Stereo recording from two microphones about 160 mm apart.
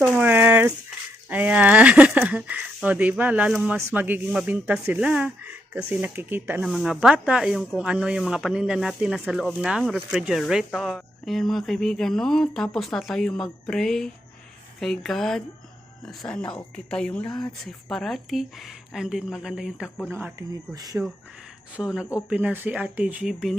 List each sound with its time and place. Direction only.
0.2 s a sound: 10° right (ahead or behind)
1.3 s speech: 10° right (ahead or behind)
6.7 s a woman's voice: centre (ahead or behind)
20.7 s speech: 25° right (ahead or behind)
21.8 s speech: 5° right (ahead or behind)